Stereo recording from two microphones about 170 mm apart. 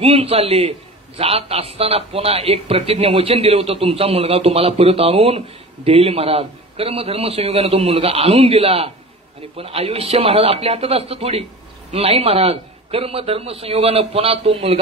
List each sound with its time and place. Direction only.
0.0 s a man's voice: 35° right (ahead or behind)